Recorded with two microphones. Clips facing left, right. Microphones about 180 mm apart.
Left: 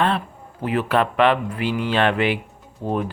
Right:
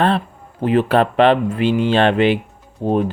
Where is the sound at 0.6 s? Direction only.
30° right (ahead or behind).